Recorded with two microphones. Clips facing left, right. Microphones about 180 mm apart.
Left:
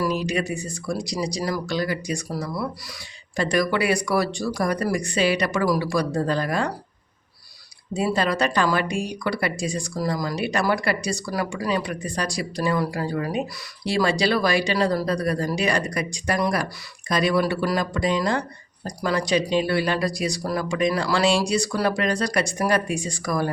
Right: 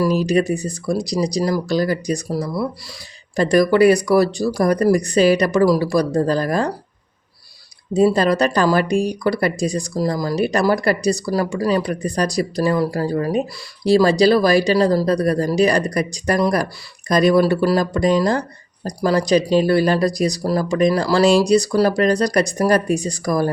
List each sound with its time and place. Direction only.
0.0 s speech: 35° right (ahead or behind)
7.9 s speech: 40° right (ahead or behind)